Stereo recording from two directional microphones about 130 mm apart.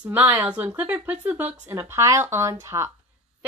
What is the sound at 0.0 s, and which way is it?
Speech, 10° right (ahead or behind).